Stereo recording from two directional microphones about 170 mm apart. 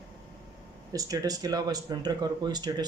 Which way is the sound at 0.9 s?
20° right (ahead or behind).